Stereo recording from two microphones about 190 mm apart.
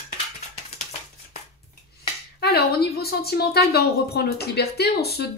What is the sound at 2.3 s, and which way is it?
Speech, 55° left (ahead or behind).